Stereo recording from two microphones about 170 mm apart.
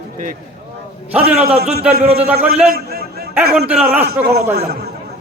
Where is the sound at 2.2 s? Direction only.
5° right (ahead or behind).